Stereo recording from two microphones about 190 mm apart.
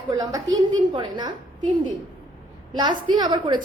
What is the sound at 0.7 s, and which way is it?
Speech, 25° right (ahead or behind).